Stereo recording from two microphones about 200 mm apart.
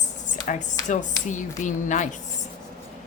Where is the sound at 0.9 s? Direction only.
40° left (ahead or behind).